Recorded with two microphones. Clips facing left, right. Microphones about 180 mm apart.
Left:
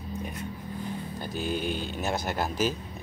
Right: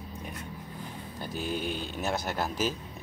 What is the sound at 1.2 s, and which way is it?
Speech, centre (ahead or behind).